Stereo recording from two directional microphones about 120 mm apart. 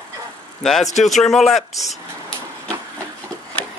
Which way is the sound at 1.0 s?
Centre (ahead or behind).